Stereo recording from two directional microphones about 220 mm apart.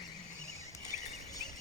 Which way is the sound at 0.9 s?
30° left (ahead or behind).